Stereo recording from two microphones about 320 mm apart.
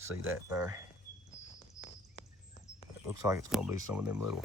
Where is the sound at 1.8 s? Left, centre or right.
Left.